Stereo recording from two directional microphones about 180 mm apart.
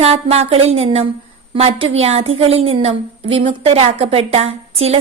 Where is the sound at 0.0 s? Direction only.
35° right (ahead or behind).